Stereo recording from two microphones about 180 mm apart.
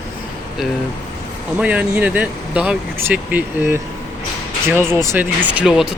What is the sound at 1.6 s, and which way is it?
Speech, 5° right (ahead or behind).